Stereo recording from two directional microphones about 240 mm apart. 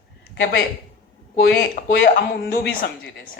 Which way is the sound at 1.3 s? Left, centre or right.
Left.